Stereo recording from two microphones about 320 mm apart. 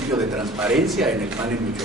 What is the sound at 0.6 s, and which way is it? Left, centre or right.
Speech, centre.